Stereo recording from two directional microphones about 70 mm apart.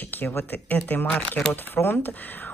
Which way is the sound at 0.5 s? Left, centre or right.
Left.